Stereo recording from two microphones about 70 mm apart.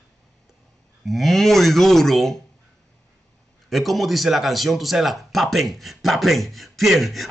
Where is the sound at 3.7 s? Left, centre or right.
Centre.